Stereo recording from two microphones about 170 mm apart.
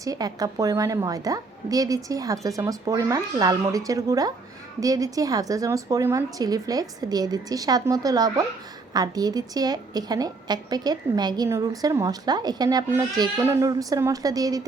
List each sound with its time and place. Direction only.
0.0 s a woman's voice: 20° right (ahead or behind)